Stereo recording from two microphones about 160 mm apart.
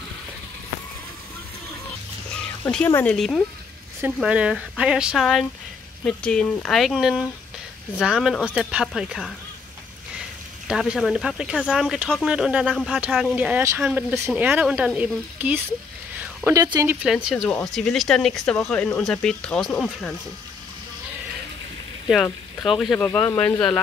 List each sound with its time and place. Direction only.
2.6 s speech: 10° left (ahead or behind)
10.7 s speech: centre (ahead or behind)
16.2 s a sound: 10° right (ahead or behind)
16.5 s speech: 25° right (ahead or behind)
16.8 s speech: 5° right (ahead or behind)
22.0 s speech: centre (ahead or behind)